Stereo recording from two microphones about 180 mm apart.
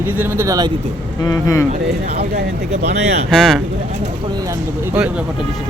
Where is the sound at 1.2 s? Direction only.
20° left (ahead or behind).